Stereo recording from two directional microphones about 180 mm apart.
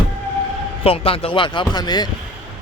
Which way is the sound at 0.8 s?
30° left (ahead or behind).